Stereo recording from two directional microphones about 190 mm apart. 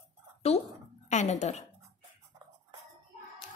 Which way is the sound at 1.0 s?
40° left (ahead or behind).